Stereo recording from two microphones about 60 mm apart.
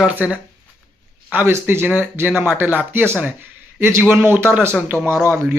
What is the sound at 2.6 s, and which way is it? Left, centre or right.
Speech, right.